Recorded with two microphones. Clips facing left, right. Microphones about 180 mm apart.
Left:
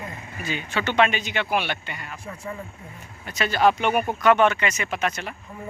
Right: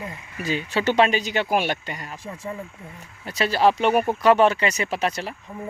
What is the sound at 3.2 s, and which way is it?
Speech, 35° right (ahead or behind).